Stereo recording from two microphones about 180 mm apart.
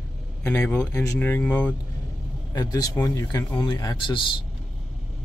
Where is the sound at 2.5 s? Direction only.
20° left (ahead or behind).